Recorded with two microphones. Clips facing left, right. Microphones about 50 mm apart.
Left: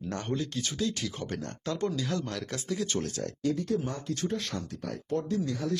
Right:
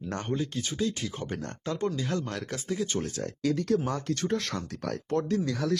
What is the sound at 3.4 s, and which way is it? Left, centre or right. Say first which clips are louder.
Speech: right 3 dB; right.